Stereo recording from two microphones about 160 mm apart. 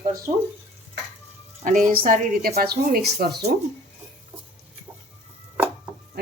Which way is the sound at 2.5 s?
80° right.